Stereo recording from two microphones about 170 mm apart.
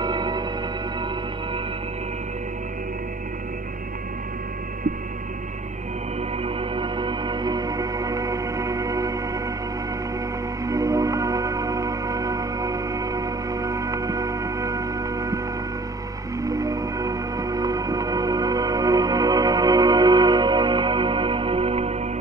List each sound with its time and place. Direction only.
0.0 s music: 25° right (ahead or behind)
6.4 s music: 30° right (ahead or behind)
10.6 s music: 20° right (ahead or behind); by 21.9 s 35° right (ahead or behind)